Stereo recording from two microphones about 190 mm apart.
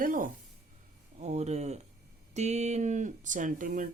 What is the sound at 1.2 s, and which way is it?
Speech, 35° right (ahead or behind).